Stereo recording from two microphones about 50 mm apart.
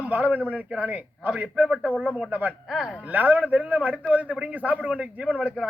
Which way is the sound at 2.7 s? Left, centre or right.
Centre.